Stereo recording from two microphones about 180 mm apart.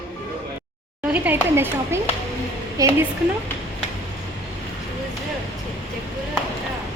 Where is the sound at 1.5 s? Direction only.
15° right (ahead or behind).